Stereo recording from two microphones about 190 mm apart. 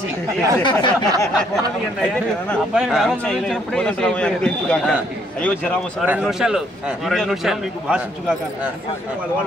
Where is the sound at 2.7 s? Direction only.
Centre (ahead or behind).